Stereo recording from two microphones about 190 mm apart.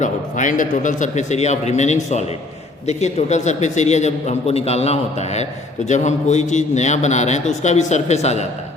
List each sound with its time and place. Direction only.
0.0 s a man's voice: 40° left (ahead or behind)